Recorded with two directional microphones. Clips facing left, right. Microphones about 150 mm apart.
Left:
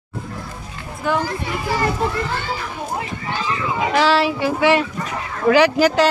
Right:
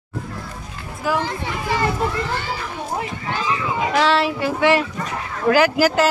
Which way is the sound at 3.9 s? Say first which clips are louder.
Left 2 dB; centre (ahead or behind).